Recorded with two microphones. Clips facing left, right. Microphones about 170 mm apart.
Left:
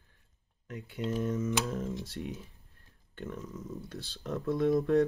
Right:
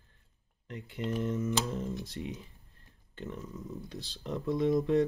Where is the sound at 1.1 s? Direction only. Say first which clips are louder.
Even; centre (ahead or behind).